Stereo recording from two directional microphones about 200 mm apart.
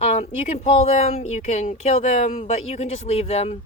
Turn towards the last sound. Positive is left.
turn(degrees=30)  # may be behind; listen again after turning